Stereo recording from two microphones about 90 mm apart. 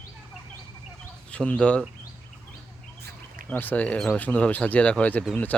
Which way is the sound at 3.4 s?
20° left (ahead or behind).